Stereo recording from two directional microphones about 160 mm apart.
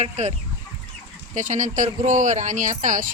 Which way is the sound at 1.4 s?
55° right (ahead or behind).